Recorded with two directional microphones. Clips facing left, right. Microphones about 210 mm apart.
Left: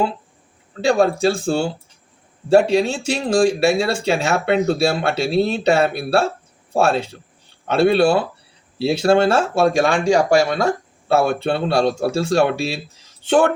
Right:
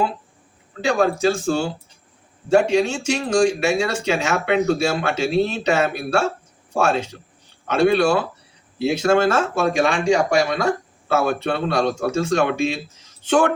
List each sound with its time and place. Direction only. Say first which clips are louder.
0.9 s speech: left 2 dB; 35° left (ahead or behind)